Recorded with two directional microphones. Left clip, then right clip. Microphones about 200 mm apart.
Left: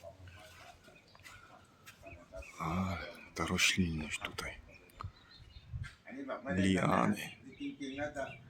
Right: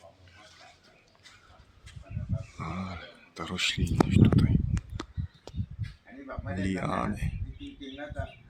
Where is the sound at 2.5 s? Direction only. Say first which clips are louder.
Left 1 dB; 5° left (ahead or behind).